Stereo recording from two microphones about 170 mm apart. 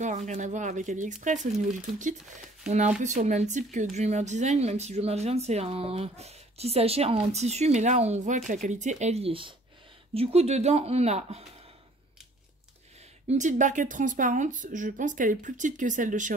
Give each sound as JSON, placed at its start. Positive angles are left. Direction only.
{"t": 0.0, "sound": "a woman's voice", "side_deg": -45}
{"t": 13.3, "sound": "a woman's voice", "side_deg": -45}